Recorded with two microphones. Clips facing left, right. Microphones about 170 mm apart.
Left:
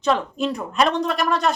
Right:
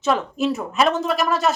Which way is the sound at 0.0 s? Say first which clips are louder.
Right 1 dB; 5° right (ahead or behind).